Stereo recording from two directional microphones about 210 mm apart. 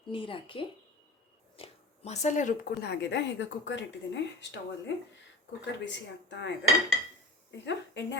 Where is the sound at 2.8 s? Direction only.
50° left (ahead or behind).